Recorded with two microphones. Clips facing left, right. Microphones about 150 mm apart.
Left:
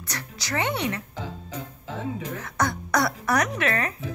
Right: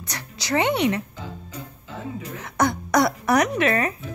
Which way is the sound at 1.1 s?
90° left.